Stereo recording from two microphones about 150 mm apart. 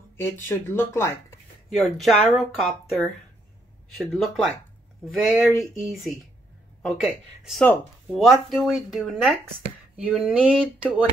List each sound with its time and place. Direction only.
0.2 s speech: 15° left (ahead or behind)
1.7 s speech: centre (ahead or behind)
9.9 s a sound: 5° right (ahead or behind)